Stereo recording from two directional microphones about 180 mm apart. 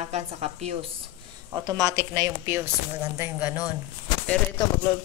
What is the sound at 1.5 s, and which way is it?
Speech, 20° right (ahead or behind).